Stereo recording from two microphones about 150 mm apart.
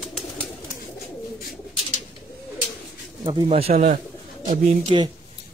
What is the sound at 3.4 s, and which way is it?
Speech, 45° right (ahead or behind).